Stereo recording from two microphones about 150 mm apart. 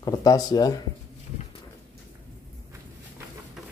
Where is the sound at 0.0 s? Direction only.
25° left (ahead or behind).